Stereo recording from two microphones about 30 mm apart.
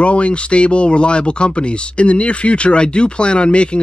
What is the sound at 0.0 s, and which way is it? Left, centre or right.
Speech, left.